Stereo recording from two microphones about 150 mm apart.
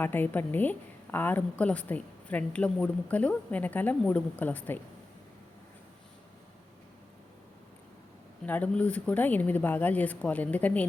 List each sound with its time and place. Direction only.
0.0 s a woman's voice: 15° left (ahead or behind)
8.4 s a woman's voice: 10° left (ahead or behind)